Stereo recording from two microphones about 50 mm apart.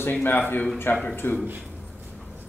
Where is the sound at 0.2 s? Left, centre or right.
Left.